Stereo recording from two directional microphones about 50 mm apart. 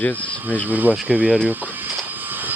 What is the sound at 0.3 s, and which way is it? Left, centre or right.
Speech, right.